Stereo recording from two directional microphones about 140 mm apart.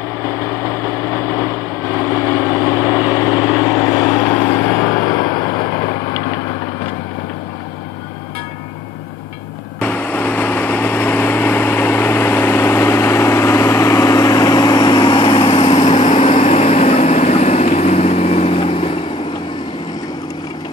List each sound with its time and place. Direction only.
0.2 s light engine: 15° left (ahead or behind)
2.1 s vehicle: 15° right (ahead or behind)
3.4 s vehicle: 20° left (ahead or behind)
9.8 s light engine: 10° left (ahead or behind); by 18.9 s 40° left (ahead or behind)